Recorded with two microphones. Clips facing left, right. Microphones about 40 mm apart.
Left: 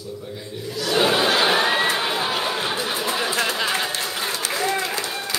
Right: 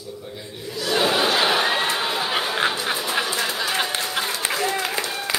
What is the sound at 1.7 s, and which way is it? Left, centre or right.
Crowd, left.